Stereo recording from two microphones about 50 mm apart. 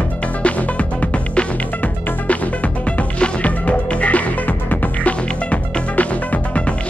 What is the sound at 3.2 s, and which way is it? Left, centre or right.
Music, left.